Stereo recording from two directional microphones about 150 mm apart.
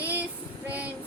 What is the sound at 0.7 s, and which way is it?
Child singing, 10° right (ahead or behind).